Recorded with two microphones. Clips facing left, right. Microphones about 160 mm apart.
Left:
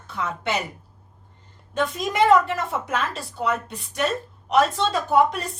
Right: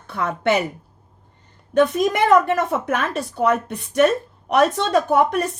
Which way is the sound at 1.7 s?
60° right (ahead or behind).